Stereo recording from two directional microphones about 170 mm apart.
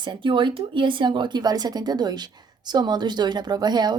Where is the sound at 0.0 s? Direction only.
25° right (ahead or behind).